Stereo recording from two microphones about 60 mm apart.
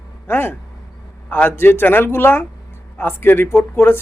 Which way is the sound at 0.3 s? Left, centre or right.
Left.